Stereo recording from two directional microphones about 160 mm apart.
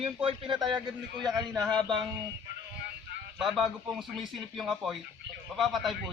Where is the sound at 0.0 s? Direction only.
35° right (ahead or behind).